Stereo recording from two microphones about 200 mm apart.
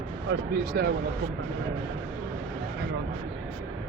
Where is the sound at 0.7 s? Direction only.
55° right (ahead or behind).